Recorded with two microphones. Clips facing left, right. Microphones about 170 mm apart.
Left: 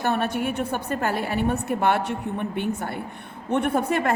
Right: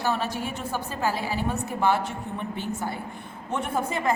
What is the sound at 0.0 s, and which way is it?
A woman's voice, 60° left (ahead or behind).